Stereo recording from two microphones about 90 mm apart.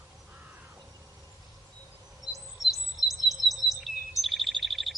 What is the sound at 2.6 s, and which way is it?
Chirp, centre (ahead or behind).